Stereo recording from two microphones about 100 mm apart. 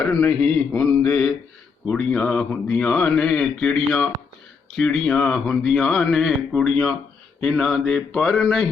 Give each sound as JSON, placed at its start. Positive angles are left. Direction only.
{"t": 0.2, "sound": "speech", "side_deg": 15}
{"t": 1.9, "sound": "a man's voice", "side_deg": 5}